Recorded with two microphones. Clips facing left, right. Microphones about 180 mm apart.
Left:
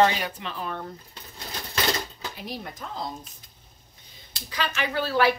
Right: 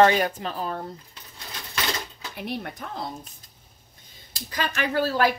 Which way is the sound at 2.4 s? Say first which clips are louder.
Right 6 dB; 60° right (ahead or behind).